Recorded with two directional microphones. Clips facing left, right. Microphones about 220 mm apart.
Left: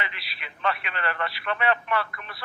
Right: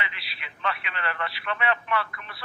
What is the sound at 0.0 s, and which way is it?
Speech, 45° left (ahead or behind).